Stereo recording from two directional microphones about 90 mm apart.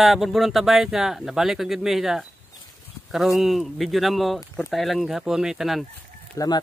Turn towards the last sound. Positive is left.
turn(degrees=40)  # may be behind; listen again after turning